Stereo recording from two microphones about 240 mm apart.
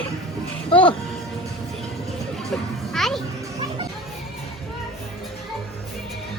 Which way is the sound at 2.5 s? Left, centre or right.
Centre.